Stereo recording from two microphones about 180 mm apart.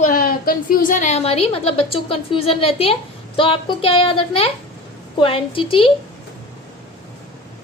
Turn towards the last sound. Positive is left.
turn(degrees=30)  # may be behind; listen again after turning